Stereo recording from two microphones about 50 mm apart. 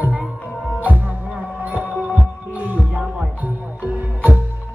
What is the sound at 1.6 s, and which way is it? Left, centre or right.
Heart sounds, right.